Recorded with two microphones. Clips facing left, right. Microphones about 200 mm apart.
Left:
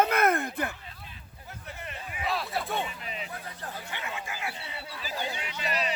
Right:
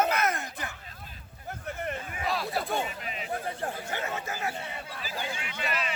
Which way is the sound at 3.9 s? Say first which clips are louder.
Right 4 dB; 40° right (ahead or behind).